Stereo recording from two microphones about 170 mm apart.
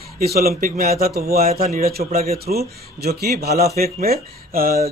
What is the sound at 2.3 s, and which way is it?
A man's voice, 65° right (ahead or behind).